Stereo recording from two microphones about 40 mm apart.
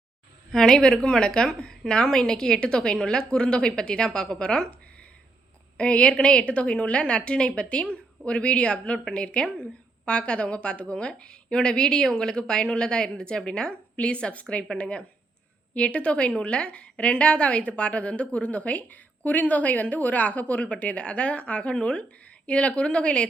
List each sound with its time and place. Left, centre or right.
0.5 s a woman's voice: centre
5.7 s a woman's voice: left